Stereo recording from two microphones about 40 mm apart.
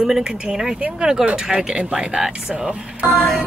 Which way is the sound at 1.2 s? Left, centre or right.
Right.